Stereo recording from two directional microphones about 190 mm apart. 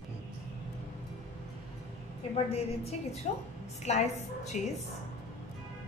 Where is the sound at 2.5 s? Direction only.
35° left (ahead or behind).